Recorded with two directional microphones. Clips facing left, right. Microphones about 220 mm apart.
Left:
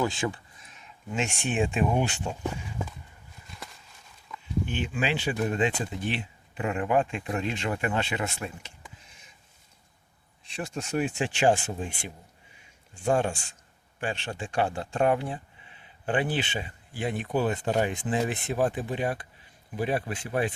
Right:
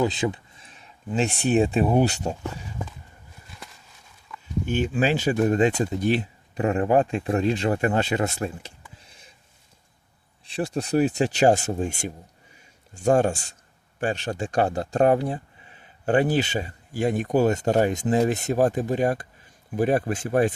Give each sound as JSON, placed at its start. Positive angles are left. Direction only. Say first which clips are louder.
{"t": 0.0, "sound": "a sound", "louder": "right 5 dB", "side_deg": -20}
{"t": 0.7, "sound": "speech", "louder": "right 6 dB", "side_deg": -35}
{"t": 4.6, "sound": "speech", "louder": "right 8 dB", "side_deg": -45}
{"t": 10.4, "sound": "speech", "louder": "right 7 dB", "side_deg": -35}